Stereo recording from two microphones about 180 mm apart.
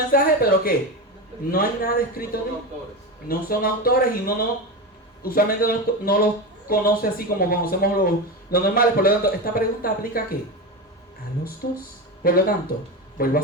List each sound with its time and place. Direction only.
0.1 s speech: 55° left (ahead or behind)
11.6 s a man's voice: 55° left (ahead or behind)